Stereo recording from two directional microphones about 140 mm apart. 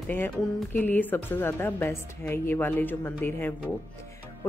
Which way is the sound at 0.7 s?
15° left (ahead or behind).